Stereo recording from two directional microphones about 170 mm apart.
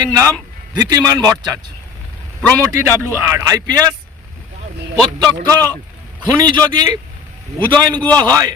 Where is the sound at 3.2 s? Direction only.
20° right (ahead or behind).